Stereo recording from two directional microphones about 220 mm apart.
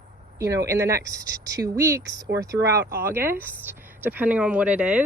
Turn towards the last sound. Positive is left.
turn(degrees=-5)  # may be behind; listen again after turning